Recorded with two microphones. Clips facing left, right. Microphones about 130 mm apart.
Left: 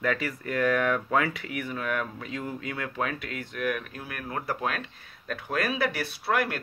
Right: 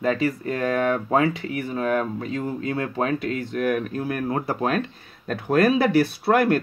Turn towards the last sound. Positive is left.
turn(degrees=-45)  # may be behind; listen again after turning